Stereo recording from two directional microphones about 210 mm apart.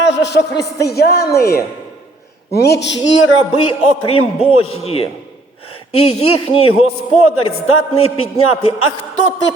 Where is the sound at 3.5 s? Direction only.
25° left (ahead or behind).